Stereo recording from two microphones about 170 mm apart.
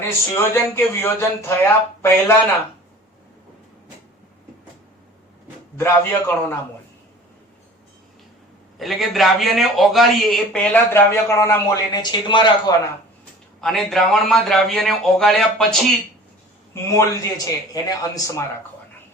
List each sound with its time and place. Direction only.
0.0 s speech: 15° left (ahead or behind)
5.7 s speech: 15° left (ahead or behind)
8.8 s speech: centre (ahead or behind); by 12.7 s 25° left (ahead or behind)
13.6 s speech: centre (ahead or behind)
16.7 s a man's voice: 20° left (ahead or behind)